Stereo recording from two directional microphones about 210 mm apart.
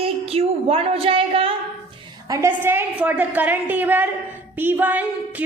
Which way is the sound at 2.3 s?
10° right (ahead or behind).